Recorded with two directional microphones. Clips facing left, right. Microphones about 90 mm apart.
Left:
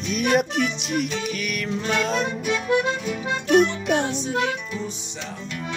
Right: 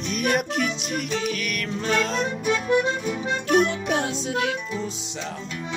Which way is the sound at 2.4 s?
30° right (ahead or behind).